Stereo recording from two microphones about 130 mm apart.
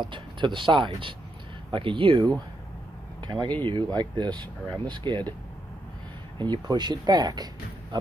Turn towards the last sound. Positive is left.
turn(degrees=-30)  # may be behind; listen again after turning